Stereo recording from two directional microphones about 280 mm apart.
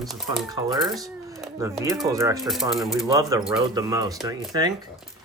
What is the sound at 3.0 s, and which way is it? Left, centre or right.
Speech, centre.